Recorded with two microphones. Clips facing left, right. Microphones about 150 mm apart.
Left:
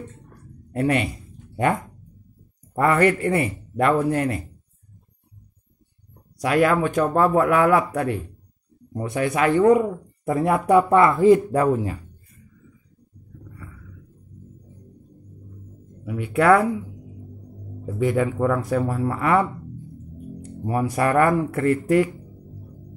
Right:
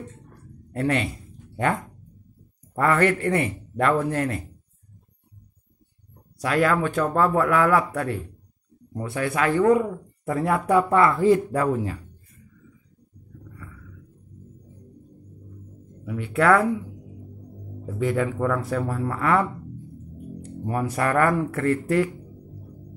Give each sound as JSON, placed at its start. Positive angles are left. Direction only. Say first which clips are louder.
{"t": 0.3, "sound": "a sound", "louder": "left 3 dB", "side_deg": 15}
{"t": 2.7, "sound": "speech", "louder": "left 2 dB", "side_deg": 10}
{"t": 6.3, "sound": "speech", "louder": "left 3 dB", "side_deg": 15}
{"t": 16.0, "sound": "speech", "louder": "left 2 dB", "side_deg": 10}
{"t": 17.9, "sound": "speech", "louder": "left 3 dB", "side_deg": 15}
{"t": 20.6, "sound": "speech", "louder": "left 3 dB", "side_deg": 15}